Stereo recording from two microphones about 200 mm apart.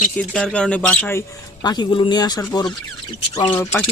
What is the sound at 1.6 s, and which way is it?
Speech, 20° left (ahead or behind).